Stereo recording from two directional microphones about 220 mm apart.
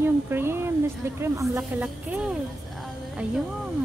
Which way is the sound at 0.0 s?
10° right (ahead or behind).